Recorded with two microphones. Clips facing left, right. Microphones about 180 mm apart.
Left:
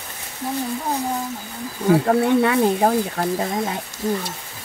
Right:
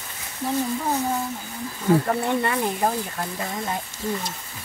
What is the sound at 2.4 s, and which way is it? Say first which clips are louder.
Speech: left 6 dB; 75° left (ahead or behind).